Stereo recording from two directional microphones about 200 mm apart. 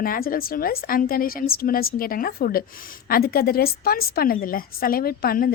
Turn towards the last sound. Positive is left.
turn(degrees=45)  # may be behind; listen again after turning